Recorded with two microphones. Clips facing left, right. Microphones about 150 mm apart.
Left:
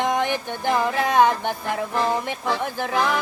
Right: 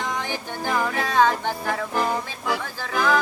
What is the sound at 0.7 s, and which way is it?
Music, 15° left (ahead or behind).